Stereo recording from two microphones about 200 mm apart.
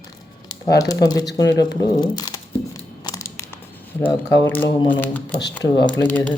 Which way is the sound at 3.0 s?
20° left (ahead or behind).